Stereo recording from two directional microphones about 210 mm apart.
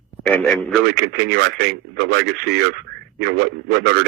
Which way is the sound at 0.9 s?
50° right (ahead or behind).